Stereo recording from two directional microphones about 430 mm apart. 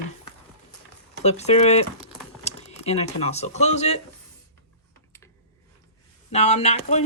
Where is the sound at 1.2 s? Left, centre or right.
Centre.